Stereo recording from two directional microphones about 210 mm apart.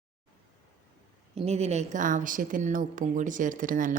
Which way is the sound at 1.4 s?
30° right (ahead or behind).